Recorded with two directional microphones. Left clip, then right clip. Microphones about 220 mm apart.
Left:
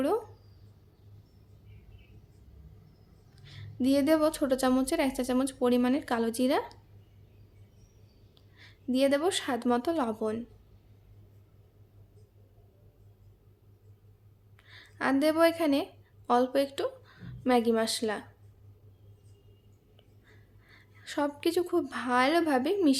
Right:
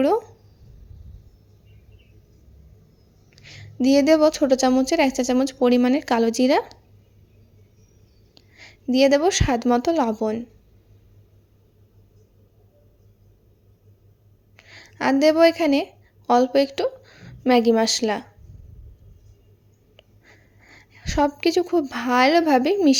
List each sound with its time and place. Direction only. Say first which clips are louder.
3.3 s a woman's voice: right 8 dB; 30° right (ahead or behind)
8.4 s a woman's voice: right 10 dB; 30° right (ahead or behind)
14.5 s a woman's voice: right 8 dB; 25° right (ahead or behind)
20.0 s speech: right 10 dB; 30° right (ahead or behind)